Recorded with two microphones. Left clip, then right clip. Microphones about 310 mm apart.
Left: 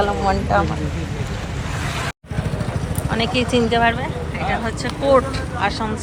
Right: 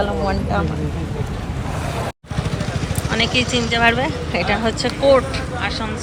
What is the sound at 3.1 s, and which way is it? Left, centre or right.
Speech, centre.